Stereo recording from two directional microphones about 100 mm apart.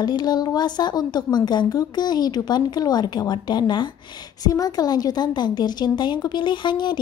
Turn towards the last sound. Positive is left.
turn(degrees=50)  # may be behind; listen again after turning